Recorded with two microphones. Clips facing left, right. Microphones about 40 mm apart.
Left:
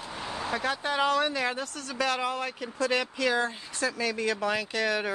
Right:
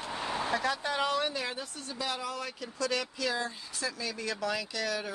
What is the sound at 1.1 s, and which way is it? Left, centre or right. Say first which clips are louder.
Speech: left 5 dB; left.